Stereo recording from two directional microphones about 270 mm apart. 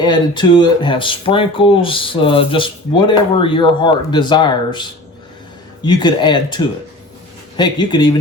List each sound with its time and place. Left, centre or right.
0.0 s speech: centre